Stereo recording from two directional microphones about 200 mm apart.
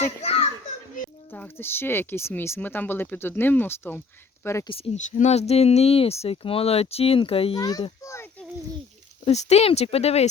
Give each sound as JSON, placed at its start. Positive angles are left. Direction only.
{"t": 0.2, "sound": "children playing", "side_deg": 30}
{"t": 1.3, "sound": "speech", "side_deg": 10}
{"t": 4.7, "sound": "speech", "side_deg": 35}
{"t": 9.2, "sound": "speech", "side_deg": 35}